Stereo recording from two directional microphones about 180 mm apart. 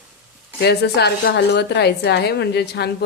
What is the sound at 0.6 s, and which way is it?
A woman's voice, 65° left (ahead or behind).